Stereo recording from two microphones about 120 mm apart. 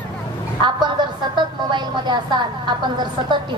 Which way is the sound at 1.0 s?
40° right (ahead or behind).